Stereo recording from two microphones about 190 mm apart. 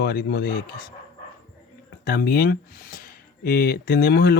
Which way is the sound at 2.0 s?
55° left (ahead or behind).